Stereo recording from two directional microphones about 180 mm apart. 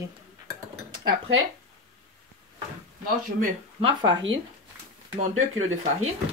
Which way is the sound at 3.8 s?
25° right (ahead or behind).